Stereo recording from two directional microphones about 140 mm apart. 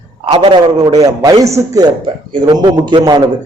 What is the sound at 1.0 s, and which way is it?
A man's voice, 25° right (ahead or behind).